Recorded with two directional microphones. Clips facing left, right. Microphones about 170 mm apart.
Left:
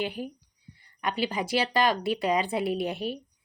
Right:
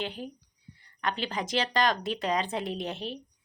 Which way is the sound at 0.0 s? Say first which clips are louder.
Left 4 dB; 10° left (ahead or behind).